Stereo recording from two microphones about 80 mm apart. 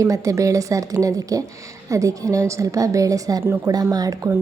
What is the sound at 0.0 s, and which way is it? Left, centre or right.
A woman's voice, right.